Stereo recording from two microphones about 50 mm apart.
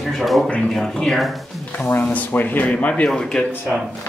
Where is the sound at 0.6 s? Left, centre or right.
Centre.